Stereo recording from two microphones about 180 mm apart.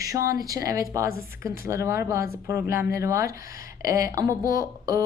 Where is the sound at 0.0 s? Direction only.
15° right (ahead or behind).